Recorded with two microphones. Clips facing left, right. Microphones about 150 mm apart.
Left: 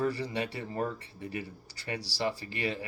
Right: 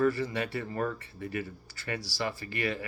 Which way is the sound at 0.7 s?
25° left (ahead or behind).